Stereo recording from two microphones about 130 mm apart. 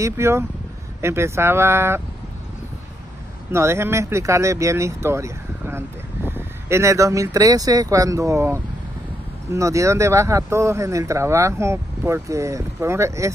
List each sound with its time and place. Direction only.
0.0 s speech: 20° right (ahead or behind)
3.5 s speech: 20° right (ahead or behind)